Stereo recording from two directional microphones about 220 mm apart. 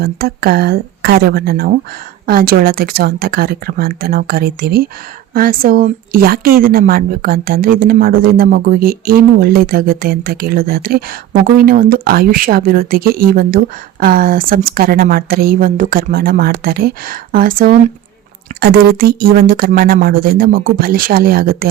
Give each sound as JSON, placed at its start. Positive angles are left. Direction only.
{"t": 0.0, "sound": "a woman's voice", "side_deg": -45}